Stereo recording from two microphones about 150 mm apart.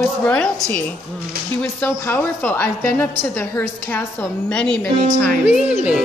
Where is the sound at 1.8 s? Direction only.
10° left (ahead or behind).